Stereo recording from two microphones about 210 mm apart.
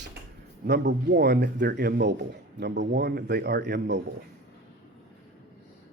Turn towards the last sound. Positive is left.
turn(degrees=-55)  # may be behind; listen again after turning